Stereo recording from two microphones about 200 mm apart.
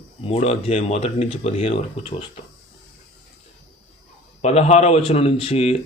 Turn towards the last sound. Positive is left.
turn(degrees=30)  # may be behind; listen again after turning